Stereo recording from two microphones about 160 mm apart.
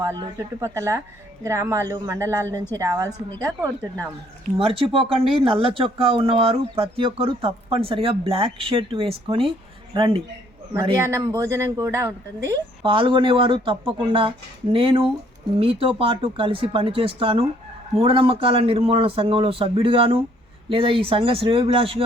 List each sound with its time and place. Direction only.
0.0 s speech: 15° right (ahead or behind)
4.5 s speech: 35° right (ahead or behind)
11.0 s speech: 20° right (ahead or behind)
12.8 s speech: 30° right (ahead or behind)